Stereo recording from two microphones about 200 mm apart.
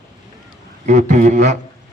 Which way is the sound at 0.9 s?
35° right (ahead or behind).